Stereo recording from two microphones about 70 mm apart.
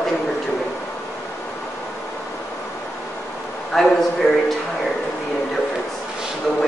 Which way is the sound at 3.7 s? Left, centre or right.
Centre.